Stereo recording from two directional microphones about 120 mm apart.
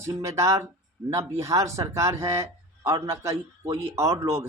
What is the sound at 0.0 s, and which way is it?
Speech, 25° right (ahead or behind).